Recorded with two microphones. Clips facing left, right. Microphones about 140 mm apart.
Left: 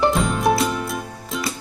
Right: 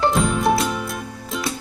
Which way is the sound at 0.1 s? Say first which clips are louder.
Even; centre (ahead or behind).